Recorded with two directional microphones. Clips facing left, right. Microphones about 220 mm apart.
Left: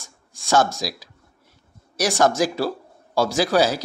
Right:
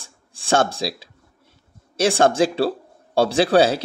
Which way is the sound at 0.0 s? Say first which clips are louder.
Even; 30° right (ahead or behind).